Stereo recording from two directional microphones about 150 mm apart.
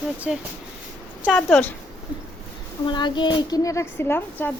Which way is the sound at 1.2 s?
10° left (ahead or behind).